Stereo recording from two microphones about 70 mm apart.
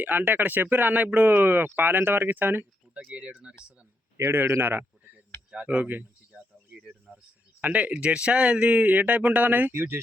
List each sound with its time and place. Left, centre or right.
0.0 s speech: right
3.1 s speech: centre
4.2 s a man's voice: right
5.5 s speech: centre
7.1 s speech: centre